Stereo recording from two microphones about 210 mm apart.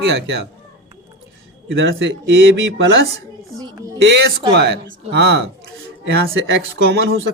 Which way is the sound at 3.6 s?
15° right (ahead or behind).